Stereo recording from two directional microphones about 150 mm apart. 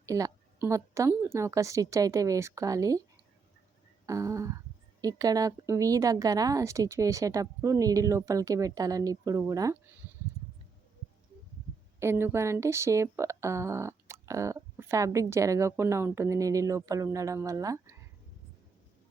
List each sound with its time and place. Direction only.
0.0 s speech: 20° right (ahead or behind)
4.0 s speech: 20° right (ahead or behind)
11.9 s speech: 15° right (ahead or behind)